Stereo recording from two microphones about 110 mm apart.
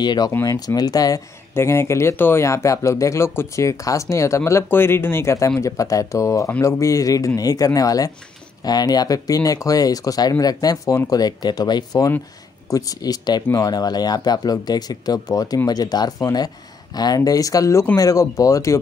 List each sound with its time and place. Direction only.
0.0 s speech: 40° left (ahead or behind)
0.3 s speech: 30° left (ahead or behind)
1.5 s speech: 25° left (ahead or behind)